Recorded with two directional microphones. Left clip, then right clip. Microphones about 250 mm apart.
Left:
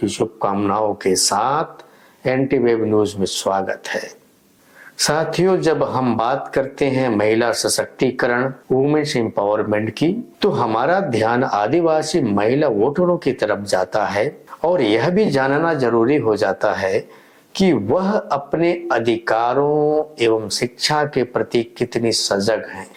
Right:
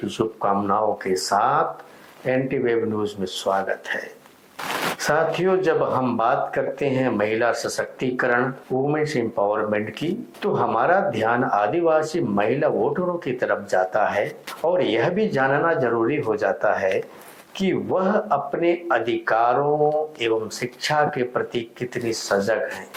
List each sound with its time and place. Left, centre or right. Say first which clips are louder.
0.1 s speech: left 2 dB; left